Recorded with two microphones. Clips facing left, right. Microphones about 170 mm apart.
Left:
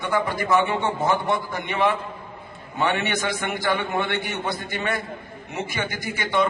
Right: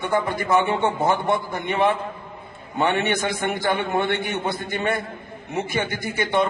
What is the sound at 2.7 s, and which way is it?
A man's voice, 50° right (ahead or behind).